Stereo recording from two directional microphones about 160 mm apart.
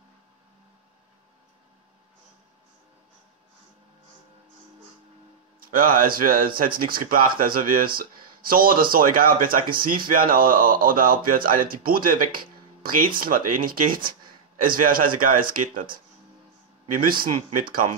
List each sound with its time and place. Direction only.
5.6 s speech: 60° right (ahead or behind)
17.0 s speech: 65° right (ahead or behind)